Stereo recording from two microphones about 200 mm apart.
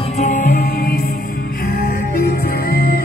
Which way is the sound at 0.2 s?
40° left (ahead or behind).